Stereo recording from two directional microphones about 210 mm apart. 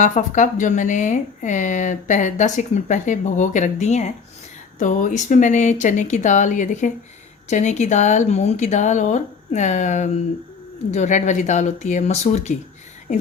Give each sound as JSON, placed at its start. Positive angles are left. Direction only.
{"t": 0.0, "sound": "a woman's voice", "side_deg": 35}